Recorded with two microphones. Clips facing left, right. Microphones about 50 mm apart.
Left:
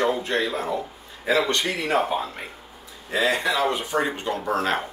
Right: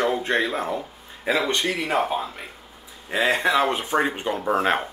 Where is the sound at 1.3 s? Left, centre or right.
Centre.